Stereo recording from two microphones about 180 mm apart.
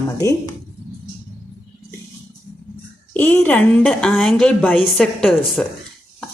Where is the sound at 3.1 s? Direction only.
10° left (ahead or behind).